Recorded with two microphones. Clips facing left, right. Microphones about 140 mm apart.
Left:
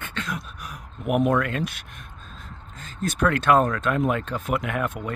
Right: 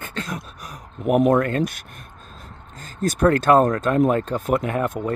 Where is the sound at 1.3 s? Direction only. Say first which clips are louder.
Right 5 dB; 40° right (ahead or behind).